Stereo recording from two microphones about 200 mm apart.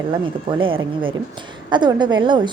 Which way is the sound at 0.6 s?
25° right (ahead or behind).